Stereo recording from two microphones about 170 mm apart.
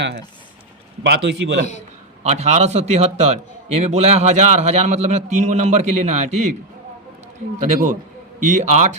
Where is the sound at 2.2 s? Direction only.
40° right (ahead or behind).